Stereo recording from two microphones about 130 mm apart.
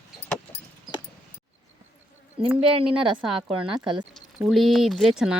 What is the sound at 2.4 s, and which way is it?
Speech, 45° right (ahead or behind).